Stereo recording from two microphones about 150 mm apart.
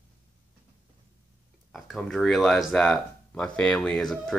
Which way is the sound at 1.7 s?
Centre (ahead or behind).